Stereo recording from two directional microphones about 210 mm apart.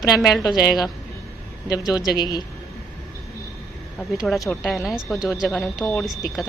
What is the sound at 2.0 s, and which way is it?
Speech, 20° left (ahead or behind).